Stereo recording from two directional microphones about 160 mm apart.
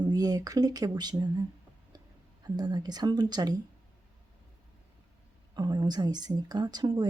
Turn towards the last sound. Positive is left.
turn(degrees=-25)  # may be behind; listen again after turning